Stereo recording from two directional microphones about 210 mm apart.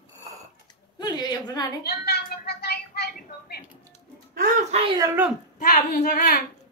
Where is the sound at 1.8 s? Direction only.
50° left (ahead or behind).